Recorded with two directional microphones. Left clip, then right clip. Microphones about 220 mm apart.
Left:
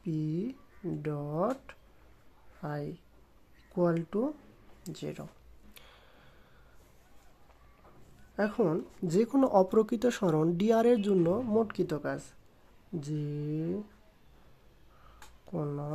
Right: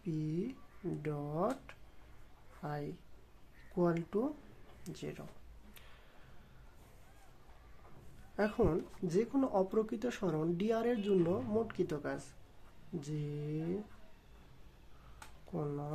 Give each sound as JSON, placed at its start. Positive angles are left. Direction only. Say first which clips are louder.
{"t": 0.0, "sound": "a sound", "louder": "left 4 dB", "side_deg": 15}
{"t": 1.0, "sound": "speech", "louder": "left 5 dB", "side_deg": 15}
{"t": 8.4, "sound": "speech", "louder": "left 4 dB", "side_deg": 15}
{"t": 15.5, "sound": "speech", "louder": "left 4 dB", "side_deg": 15}